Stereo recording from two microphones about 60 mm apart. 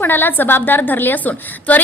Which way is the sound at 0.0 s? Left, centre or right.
Left.